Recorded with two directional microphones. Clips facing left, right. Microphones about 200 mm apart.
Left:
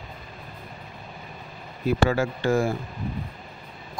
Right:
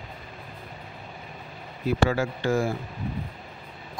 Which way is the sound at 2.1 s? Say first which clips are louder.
Left 2 dB; 50° left (ahead or behind).